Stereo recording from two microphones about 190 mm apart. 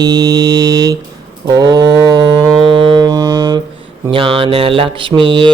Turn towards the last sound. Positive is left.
turn(degrees=-25)  # may be behind; listen again after turning